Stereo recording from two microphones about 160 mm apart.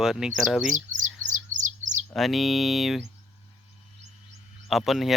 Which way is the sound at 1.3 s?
50° right (ahead or behind).